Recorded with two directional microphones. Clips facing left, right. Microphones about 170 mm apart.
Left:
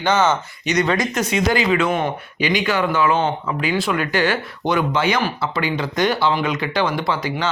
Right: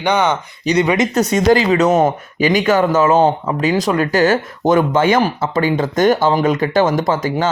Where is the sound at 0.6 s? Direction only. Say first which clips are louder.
Right 6 dB; 35° right (ahead or behind).